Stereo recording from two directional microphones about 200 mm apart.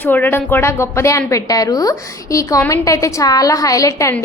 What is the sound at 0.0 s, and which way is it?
Speech, 10° left (ahead or behind).